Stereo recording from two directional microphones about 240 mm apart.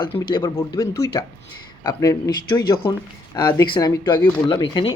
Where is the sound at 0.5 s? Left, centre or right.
Centre.